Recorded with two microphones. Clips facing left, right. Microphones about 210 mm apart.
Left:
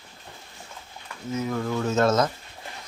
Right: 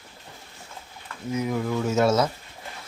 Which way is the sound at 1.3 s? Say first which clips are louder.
Right 1 dB; 15° right (ahead or behind).